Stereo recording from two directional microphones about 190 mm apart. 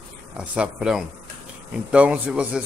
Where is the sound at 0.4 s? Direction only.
5° right (ahead or behind).